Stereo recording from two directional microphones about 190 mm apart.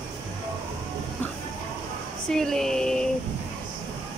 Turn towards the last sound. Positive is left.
turn(degrees=5)  # may be behind; listen again after turning